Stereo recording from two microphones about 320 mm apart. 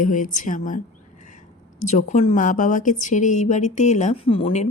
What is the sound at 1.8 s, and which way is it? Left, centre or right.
A woman's voice, left.